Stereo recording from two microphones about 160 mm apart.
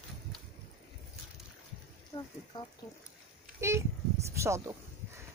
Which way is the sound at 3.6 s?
15° right (ahead or behind).